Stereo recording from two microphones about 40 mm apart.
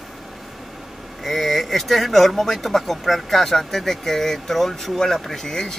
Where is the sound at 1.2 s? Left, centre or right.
Centre.